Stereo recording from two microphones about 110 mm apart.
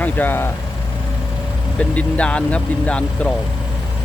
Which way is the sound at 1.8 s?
10° left (ahead or behind).